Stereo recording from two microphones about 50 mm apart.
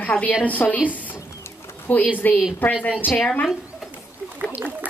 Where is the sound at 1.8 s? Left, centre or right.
Left.